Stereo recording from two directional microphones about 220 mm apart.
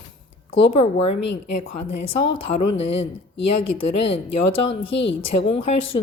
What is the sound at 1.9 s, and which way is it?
A woman's voice, 25° left (ahead or behind).